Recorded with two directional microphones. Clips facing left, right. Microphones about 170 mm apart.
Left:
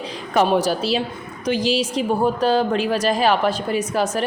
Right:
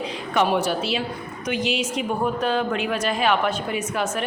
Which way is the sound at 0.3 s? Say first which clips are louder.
Left 3 dB; 35° left (ahead or behind).